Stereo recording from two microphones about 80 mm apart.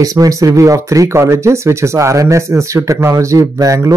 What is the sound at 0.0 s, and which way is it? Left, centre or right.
Speech, right.